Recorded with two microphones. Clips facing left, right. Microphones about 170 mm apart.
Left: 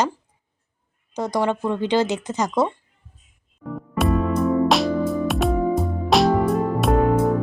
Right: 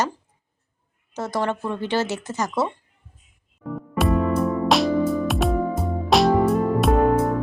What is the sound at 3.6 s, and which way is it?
Music, centre (ahead or behind).